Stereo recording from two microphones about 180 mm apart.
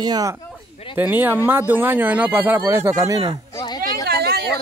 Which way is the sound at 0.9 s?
10° right (ahead or behind).